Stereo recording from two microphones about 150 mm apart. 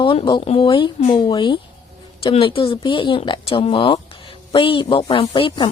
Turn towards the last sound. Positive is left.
turn(degrees=35)  # may be behind; listen again after turning